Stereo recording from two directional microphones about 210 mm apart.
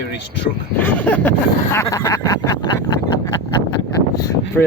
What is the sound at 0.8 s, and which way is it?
Speech, 5° left (ahead or behind).